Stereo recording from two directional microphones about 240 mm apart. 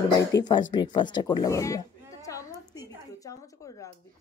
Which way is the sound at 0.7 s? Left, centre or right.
Centre.